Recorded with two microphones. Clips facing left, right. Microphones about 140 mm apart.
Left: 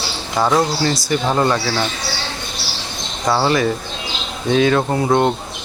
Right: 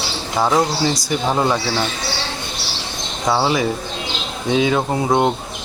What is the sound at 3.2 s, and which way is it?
Speech, 5° right (ahead or behind).